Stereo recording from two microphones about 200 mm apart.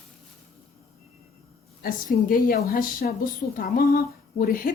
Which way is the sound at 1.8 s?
45° left (ahead or behind).